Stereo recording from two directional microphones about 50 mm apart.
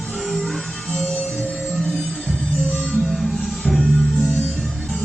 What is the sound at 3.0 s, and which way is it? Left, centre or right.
Music, centre.